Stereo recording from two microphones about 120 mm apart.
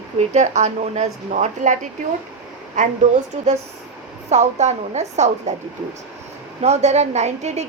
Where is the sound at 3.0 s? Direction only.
90° right.